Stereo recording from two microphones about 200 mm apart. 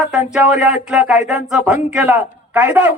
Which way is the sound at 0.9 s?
5° right (ahead or behind).